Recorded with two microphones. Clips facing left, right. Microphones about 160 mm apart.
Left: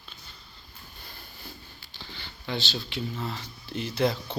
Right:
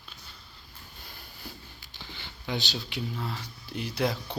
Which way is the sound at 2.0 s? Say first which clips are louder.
Even; 15° right (ahead or behind).